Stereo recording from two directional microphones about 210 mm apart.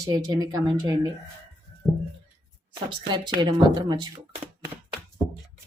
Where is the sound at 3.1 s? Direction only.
20° right (ahead or behind).